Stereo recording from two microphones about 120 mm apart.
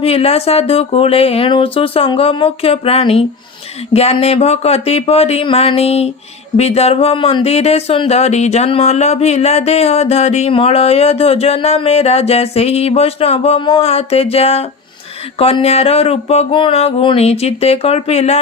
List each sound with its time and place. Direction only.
0.0 s speech: 55° left (ahead or behind)